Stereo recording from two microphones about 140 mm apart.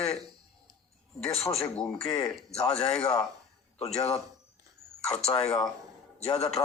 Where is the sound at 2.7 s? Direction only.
45° left (ahead or behind).